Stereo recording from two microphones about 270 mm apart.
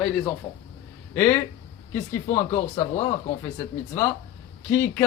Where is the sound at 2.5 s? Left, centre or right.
Left.